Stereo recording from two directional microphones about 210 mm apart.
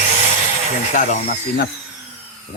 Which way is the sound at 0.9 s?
40° left (ahead or behind).